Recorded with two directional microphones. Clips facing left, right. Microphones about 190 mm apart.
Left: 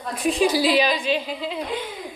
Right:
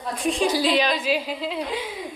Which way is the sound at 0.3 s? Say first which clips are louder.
Left 2 dB; 5° left (ahead or behind).